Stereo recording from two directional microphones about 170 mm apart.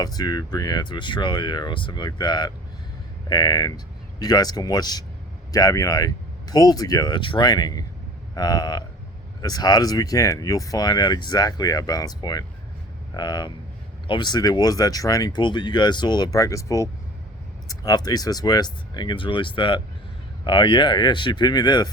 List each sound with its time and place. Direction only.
0.0 s speech: 20° left (ahead or behind)